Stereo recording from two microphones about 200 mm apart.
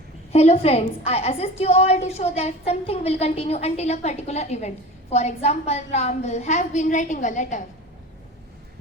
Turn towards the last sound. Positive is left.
turn(degrees=40)  # may be behind; listen again after turning